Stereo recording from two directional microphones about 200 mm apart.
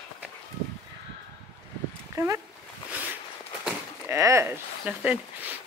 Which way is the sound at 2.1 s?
15° right (ahead or behind).